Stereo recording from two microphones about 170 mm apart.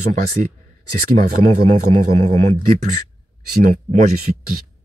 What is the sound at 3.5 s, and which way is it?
Speech, 60° right (ahead or behind).